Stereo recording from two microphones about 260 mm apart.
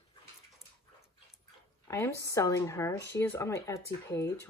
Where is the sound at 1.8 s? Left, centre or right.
Centre.